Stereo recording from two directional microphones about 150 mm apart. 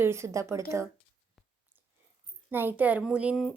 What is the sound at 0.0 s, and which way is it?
Speech, 15° right (ahead or behind).